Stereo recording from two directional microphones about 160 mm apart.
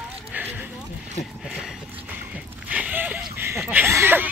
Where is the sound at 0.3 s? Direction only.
10° right (ahead or behind).